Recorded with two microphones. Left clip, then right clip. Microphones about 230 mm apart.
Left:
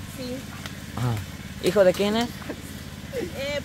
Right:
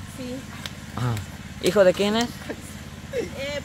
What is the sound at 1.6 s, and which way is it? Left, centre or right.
Speech, centre.